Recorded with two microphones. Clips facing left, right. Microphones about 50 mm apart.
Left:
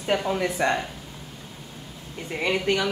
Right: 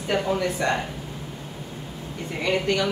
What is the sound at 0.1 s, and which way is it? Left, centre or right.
Speech, centre.